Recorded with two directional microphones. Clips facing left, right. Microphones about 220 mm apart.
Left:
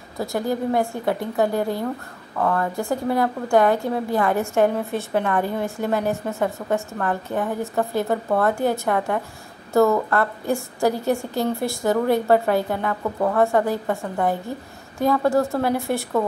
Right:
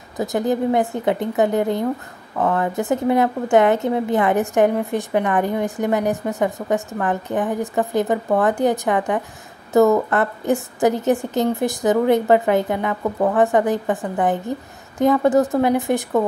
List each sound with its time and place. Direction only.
0.2 s a woman's voice: 20° right (ahead or behind)